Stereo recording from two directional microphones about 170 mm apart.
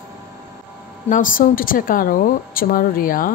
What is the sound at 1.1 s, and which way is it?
A woman's voice, 55° left (ahead or behind).